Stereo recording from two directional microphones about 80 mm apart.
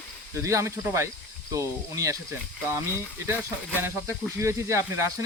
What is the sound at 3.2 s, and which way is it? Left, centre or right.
Speech, right.